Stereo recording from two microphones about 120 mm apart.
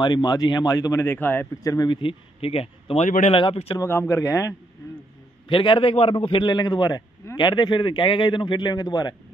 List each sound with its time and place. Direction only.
0.0 s a man's voice: 40° left (ahead or behind); by 1.6 s 20° left (ahead or behind)
1.6 s a man's voice: 30° left (ahead or behind)
2.0 s a man's voice: 50° left (ahead or behind)
3.1 s speech: 90° left
3.3 s a man's voice: 50° left (ahead or behind)
4.1 s a man's voice: 25° left (ahead or behind)
5.5 s a man's voice: 45° left (ahead or behind)